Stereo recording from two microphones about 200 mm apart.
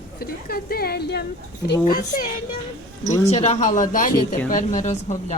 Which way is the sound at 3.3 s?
35° left (ahead or behind).